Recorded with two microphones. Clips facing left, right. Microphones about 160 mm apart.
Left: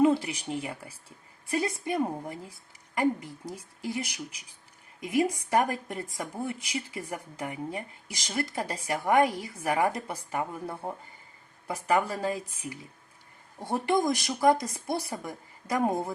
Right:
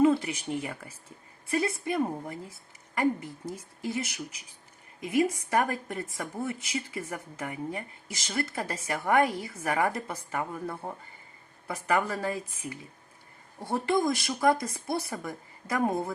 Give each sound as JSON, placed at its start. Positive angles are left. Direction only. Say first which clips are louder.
{"t": 0.0, "sound": "speech", "louder": "even", "side_deg": 15}
{"t": 3.5, "sound": "speech", "louder": "right 1 dB", "side_deg": 15}
{"t": 13.6, "sound": "speech", "louder": "even", "side_deg": 15}